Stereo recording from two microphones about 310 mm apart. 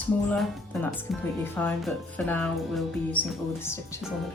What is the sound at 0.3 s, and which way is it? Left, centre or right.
Speech, centre.